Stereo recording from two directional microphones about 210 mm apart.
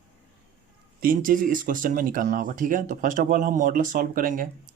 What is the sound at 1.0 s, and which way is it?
Speech, 40° right (ahead or behind).